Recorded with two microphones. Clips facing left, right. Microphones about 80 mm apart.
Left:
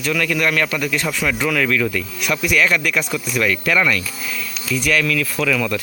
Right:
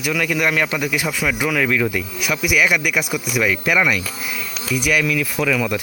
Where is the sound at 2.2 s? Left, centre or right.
Centre.